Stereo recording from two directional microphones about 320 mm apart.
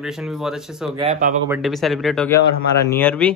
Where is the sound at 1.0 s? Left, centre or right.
Right.